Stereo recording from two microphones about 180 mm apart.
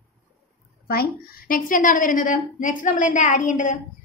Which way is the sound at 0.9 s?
55° left (ahead or behind).